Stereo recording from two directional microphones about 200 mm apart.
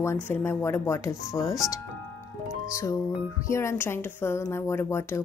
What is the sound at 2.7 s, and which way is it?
A woman's voice, 15° left (ahead or behind).